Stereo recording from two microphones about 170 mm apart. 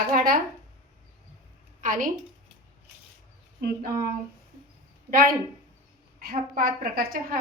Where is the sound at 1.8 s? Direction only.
50° right (ahead or behind).